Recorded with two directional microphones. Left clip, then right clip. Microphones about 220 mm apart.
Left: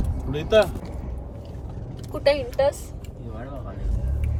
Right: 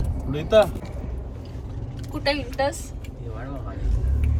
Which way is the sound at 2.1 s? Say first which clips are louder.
Left 4 dB; 25° left (ahead or behind).